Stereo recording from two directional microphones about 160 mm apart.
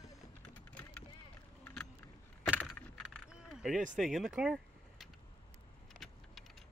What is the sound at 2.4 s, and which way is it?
Keys jangling, 5° right (ahead or behind).